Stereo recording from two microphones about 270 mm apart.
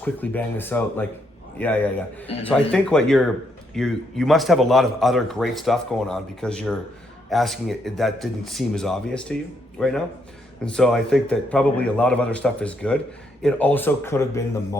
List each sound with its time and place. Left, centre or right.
0.0 s speech: centre